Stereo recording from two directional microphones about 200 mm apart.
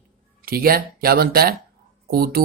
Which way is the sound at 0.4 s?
50° right (ahead or behind).